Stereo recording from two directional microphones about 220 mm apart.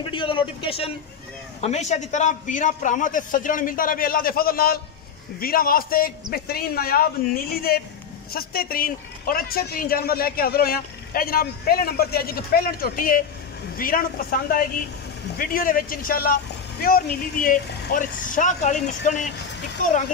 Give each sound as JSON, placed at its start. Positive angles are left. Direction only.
{"t": 0.0, "sound": "a man's voice", "side_deg": 20}